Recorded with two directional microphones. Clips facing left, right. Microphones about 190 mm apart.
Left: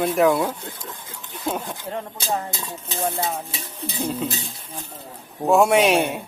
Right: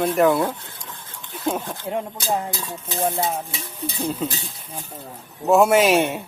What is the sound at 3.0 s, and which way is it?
Stir, 25° right (ahead or behind).